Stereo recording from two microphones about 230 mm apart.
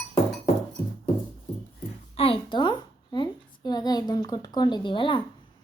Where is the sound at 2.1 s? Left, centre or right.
Left.